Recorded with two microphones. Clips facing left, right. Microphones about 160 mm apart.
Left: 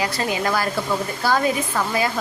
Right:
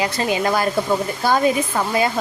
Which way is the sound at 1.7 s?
25° right (ahead or behind).